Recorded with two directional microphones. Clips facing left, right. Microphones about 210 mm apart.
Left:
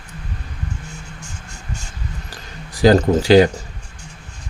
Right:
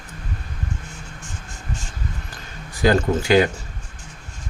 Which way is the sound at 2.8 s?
35° left (ahead or behind).